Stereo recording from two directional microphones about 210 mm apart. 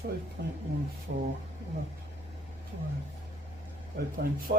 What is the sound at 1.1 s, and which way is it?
Speech, 55° right (ahead or behind).